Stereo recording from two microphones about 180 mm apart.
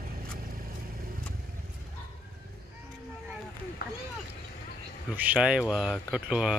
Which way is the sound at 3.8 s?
55° left (ahead or behind).